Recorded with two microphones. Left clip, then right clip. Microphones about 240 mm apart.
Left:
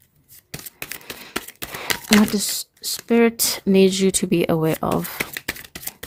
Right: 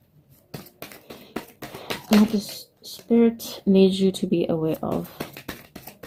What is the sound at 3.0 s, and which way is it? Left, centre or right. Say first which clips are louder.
Speech: left 3 dB; left.